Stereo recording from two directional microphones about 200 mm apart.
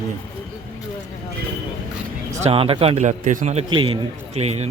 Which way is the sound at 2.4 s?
30° right (ahead or behind).